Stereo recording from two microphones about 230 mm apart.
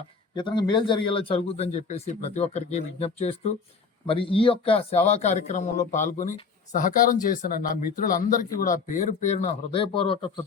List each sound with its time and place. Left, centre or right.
0.3 s speech: centre